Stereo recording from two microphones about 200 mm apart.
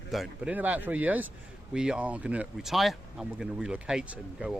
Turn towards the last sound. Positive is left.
turn(degrees=-5)  # may be behind; listen again after turning